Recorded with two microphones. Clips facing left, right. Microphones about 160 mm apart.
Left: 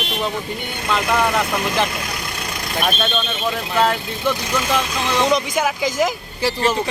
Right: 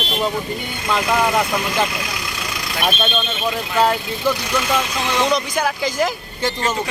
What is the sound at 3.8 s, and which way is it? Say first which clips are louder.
Speech: right 1 dB; 5° right (ahead or behind).